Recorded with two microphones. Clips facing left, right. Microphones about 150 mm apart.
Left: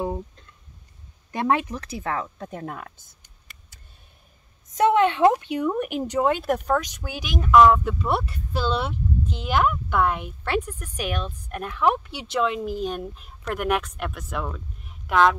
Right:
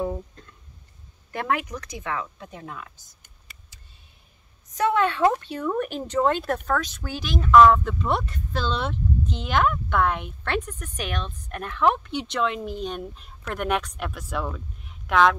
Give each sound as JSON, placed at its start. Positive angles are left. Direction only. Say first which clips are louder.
{"t": 1.3, "sound": "speech", "louder": "left 4 dB", "side_deg": 25}
{"t": 4.7, "sound": "speech", "louder": "left 3 dB", "side_deg": 20}